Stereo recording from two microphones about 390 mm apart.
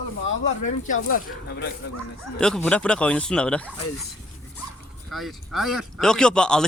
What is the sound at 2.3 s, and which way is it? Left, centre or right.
Speech, centre.